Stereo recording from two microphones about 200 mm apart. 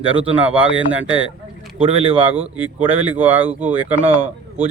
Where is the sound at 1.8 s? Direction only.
30° right (ahead or behind).